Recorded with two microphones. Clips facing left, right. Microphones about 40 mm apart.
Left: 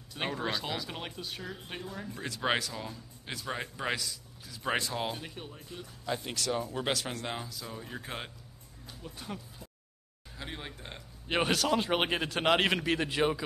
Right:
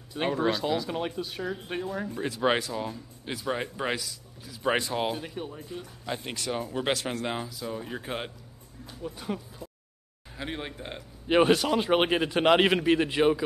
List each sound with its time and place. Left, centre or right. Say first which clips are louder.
0.1 s a man's voice: right 7 dB; centre
5.2 s speech: right 7 dB; centre
6.0 s a man's voice: even; right; by 9.7 s centre
10.3 s speech: right 6 dB; right
11.0 s a man's voice: right 8 dB; centre